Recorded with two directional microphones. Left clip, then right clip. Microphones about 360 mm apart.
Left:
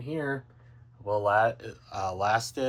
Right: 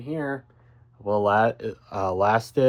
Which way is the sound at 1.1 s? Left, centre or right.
Right.